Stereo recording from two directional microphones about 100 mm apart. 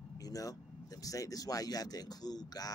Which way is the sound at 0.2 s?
35° left (ahead or behind).